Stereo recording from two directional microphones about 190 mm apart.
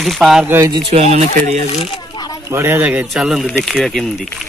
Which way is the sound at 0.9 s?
35° right (ahead or behind).